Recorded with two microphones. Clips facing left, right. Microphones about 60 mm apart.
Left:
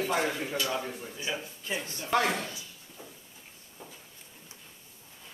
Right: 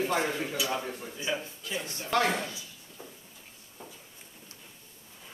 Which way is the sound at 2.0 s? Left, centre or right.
Centre.